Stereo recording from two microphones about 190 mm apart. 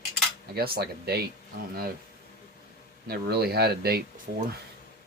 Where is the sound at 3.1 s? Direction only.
55° right (ahead or behind).